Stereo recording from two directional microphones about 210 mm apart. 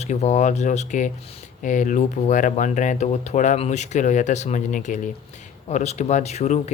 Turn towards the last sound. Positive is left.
turn(degrees=30)  # may be behind; listen again after turning